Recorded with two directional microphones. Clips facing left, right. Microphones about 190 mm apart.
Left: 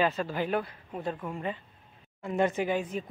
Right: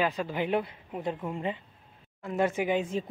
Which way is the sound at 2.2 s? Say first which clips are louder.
Even; 5° right (ahead or behind).